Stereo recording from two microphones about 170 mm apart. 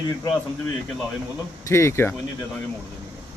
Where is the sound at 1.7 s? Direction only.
15° left (ahead or behind).